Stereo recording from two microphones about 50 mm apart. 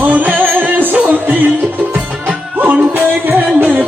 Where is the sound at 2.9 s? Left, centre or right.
Right.